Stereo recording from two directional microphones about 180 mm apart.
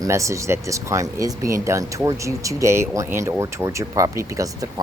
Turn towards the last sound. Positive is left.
turn(degrees=-20)  # may be behind; listen again after turning